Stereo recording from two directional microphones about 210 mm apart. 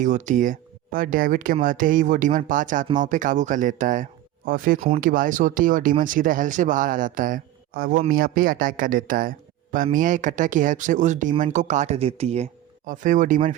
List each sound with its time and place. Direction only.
0.0 s speech: 35° right (ahead or behind)